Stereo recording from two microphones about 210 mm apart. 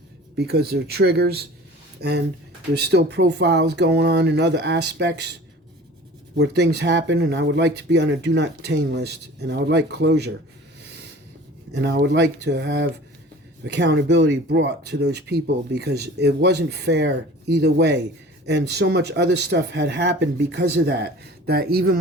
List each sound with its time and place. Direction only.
0.3 s speech: 50° right (ahead or behind)
6.3 s speech: 55° right (ahead or behind)
11.7 s speech: 55° right (ahead or behind)